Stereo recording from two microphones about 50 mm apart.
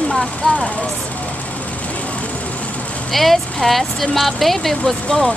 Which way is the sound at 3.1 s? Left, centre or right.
Centre.